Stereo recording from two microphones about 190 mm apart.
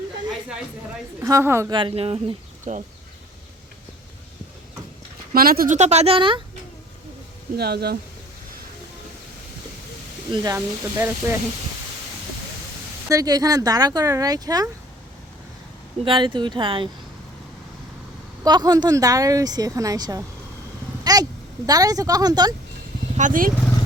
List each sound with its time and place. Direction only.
1.2 s speech: 15° right (ahead or behind)
1.7 s speech: 30° right (ahead or behind)
5.3 s speech: 50° right (ahead or behind); by 6.4 s 25° right (ahead or behind)
7.5 s speech: 55° right (ahead or behind)
10.3 s speech: 20° right (ahead or behind)
13.1 s a woman's voice: 20° right (ahead or behind)
16.0 s a woman's voice: 25° right (ahead or behind)
18.4 s a woman's voice: 20° right (ahead or behind)
21.0 s a sound: 20° right (ahead or behind)
21.7 s a woman's voice: 20° right (ahead or behind)
23.1 s speech: 45° right (ahead or behind)